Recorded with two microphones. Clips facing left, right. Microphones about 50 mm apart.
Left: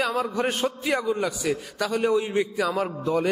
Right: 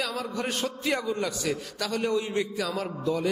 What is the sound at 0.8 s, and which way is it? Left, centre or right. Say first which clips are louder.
A man's voice: left 2 dB; centre.